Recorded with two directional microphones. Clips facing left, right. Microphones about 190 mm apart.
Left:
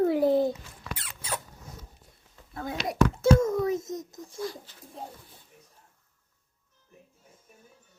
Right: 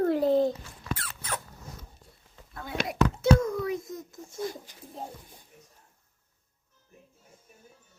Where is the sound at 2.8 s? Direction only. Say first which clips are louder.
Right 2 dB; 50° right (ahead or behind).